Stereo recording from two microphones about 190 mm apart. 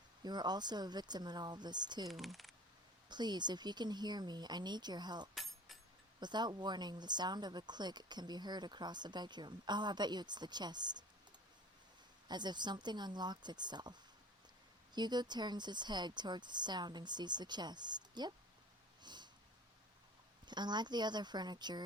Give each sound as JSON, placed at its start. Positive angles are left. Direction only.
{"t": 0.2, "sound": "speech", "side_deg": -20}
{"t": 2.0, "sound": "speech", "side_deg": 0}
{"t": 3.1, "sound": "speech", "side_deg": -20}
{"t": 5.3, "sound": "a sound", "side_deg": 0}
{"t": 6.1, "sound": "speech", "side_deg": -25}
{"t": 12.3, "sound": "speech", "side_deg": -25}
{"t": 14.9, "sound": "speech", "side_deg": -20}
{"t": 19.0, "sound": "snort", "side_deg": -25}
{"t": 20.5, "sound": "speech", "side_deg": -20}